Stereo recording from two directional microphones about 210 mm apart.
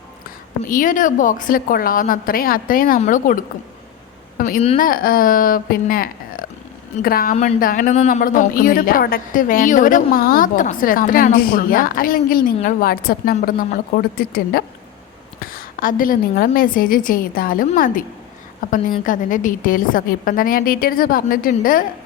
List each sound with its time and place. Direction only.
0.7 s a woman's voice: 40° left (ahead or behind)